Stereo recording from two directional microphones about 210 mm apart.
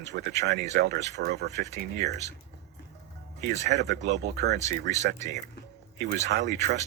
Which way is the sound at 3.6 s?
55° right (ahead or behind).